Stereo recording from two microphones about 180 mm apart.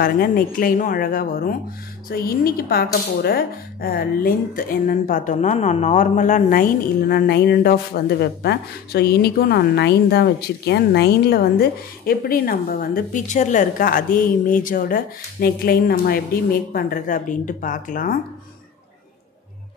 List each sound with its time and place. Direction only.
0.0 s a woman's voice: 50° left (ahead or behind)